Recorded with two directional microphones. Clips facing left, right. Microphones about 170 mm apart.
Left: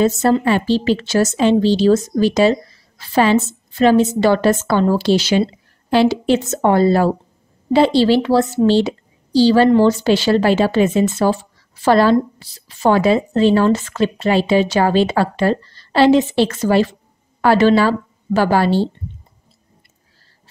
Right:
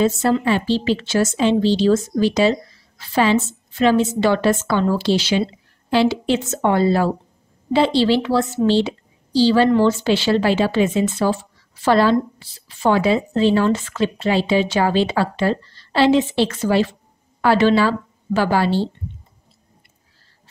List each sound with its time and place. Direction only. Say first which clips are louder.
0.0 s a woman's voice: left 3 dB; 40° left (ahead or behind)